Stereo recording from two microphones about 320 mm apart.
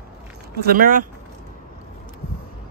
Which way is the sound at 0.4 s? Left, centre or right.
Right.